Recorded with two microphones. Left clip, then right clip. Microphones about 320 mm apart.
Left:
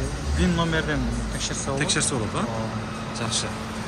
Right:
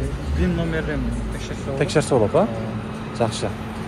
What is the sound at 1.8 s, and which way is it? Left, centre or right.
Speech, centre.